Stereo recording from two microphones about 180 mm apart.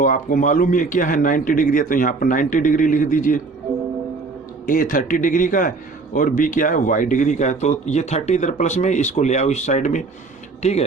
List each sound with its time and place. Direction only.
0.0 s a man's voice: 50° left (ahead or behind)
4.6 s a man's voice: 50° left (ahead or behind)